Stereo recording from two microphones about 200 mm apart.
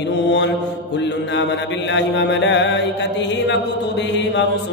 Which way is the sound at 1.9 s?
65° left (ahead or behind).